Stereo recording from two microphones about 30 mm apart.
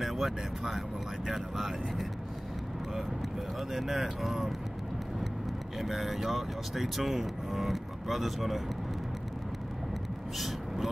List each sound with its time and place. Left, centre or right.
0.0 s speech: centre
3.7 s speech: centre
5.8 s speech: centre